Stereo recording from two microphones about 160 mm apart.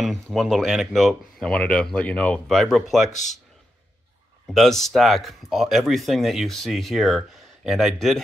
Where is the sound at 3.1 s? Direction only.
50° left (ahead or behind).